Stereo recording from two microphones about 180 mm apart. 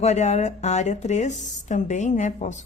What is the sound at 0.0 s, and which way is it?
A woman's voice, 40° left (ahead or behind).